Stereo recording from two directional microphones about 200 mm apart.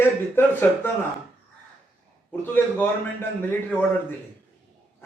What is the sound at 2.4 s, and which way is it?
Speech, 10° left (ahead or behind).